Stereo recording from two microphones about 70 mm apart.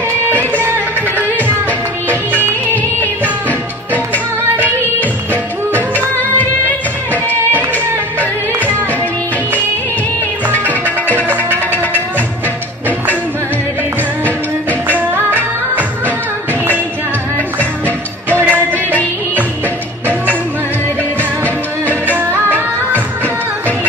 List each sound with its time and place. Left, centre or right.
0.3 s music: right
1.3 s music: left
3.4 s music: left
8.2 s music: right
10.6 s music: left
11.1 s music: right
14.9 s music: right
18.3 s music: right
22.0 s music: right